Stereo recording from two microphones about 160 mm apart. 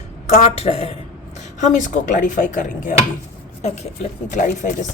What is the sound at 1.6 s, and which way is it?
Speech, 50° left (ahead or behind).